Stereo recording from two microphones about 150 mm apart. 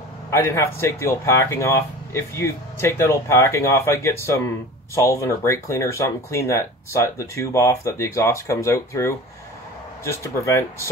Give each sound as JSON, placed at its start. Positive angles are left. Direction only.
{"t": 0.3, "sound": "speech", "side_deg": 15}